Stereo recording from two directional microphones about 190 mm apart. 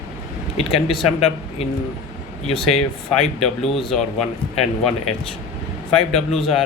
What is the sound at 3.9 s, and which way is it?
Speech, centre (ahead or behind).